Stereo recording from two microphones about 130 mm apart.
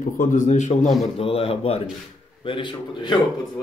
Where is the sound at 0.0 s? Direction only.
80° left; by 0.9 s 65° left (ahead or behind).